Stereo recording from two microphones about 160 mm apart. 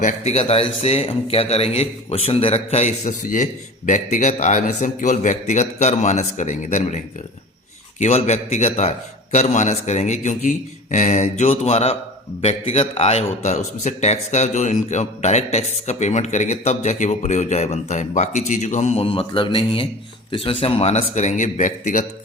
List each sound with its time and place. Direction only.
0.0 s a man's voice: 40° left (ahead or behind)